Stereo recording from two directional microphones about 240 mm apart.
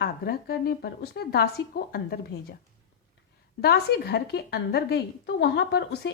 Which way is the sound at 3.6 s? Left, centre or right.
Left.